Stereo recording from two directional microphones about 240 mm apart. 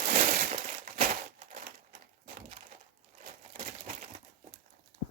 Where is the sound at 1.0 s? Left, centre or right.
Right.